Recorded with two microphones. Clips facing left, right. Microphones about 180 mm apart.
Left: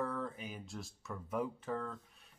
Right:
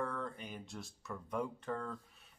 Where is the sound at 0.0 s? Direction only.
5° left (ahead or behind).